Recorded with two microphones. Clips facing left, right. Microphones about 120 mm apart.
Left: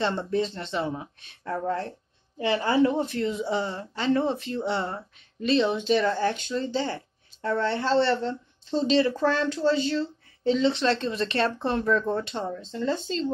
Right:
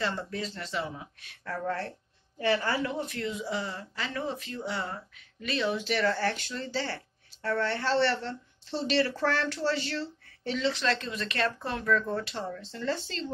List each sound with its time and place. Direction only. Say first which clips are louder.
0.0 s speech: left 7 dB; 25° left (ahead or behind)